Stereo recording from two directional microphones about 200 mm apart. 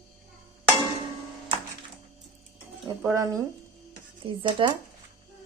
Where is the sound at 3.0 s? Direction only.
15° right (ahead or behind).